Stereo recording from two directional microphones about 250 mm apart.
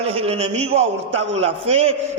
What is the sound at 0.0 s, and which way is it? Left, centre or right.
A man's voice, right.